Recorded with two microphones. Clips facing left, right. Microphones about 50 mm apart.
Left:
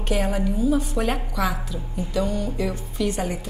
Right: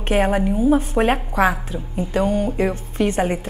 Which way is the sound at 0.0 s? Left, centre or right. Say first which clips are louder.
Right 6 dB; right.